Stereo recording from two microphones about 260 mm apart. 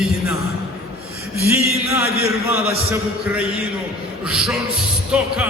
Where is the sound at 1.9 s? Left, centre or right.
Centre.